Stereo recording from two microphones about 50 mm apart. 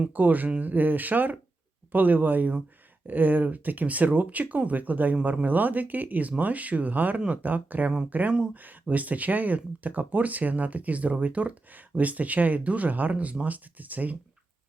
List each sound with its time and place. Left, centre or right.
0.1 s speech: right